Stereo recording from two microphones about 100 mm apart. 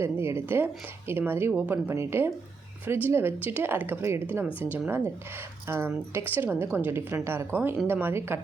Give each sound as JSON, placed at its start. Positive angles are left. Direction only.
{"t": 0.0, "sound": "a woman's voice", "side_deg": -25}